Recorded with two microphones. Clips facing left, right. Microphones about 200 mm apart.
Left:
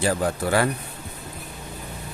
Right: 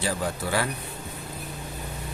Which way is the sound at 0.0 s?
50° left (ahead or behind).